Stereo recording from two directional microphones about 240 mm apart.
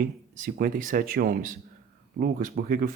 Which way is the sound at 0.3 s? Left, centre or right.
Right.